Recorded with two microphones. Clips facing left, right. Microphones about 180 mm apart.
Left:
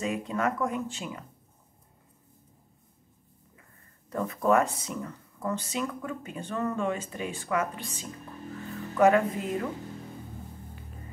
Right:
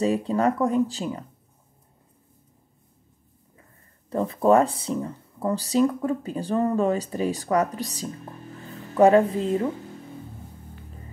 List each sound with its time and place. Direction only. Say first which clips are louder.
0.0 s speech: right 7 dB; 35° right (ahead or behind)
4.1 s speech: right 6 dB; 30° right (ahead or behind)